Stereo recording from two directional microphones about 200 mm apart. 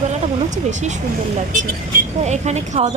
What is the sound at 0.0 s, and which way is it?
Speech, 35° right (ahead or behind).